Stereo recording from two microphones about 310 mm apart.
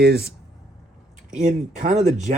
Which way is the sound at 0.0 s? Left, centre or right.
Right.